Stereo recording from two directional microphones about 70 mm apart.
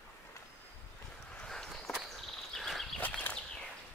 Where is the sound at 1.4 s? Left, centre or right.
Centre.